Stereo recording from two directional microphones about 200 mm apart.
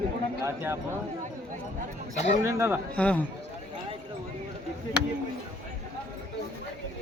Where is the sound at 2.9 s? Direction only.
5° left (ahead or behind).